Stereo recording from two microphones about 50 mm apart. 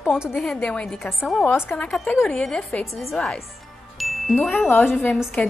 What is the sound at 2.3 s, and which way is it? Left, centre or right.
Speech, centre.